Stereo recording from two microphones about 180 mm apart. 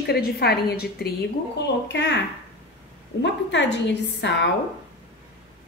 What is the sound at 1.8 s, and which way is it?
Speech, 80° left.